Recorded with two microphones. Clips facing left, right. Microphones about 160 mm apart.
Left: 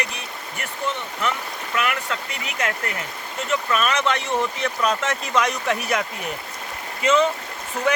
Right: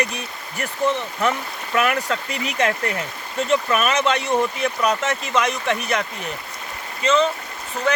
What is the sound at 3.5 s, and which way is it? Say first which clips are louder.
Speech: right 3 dB; 20° right (ahead or behind).